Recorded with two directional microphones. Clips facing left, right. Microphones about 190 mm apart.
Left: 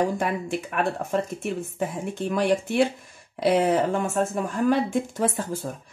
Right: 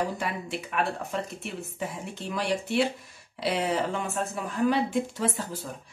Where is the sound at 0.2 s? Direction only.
50° left (ahead or behind).